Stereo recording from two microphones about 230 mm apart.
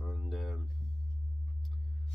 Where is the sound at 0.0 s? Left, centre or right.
Centre.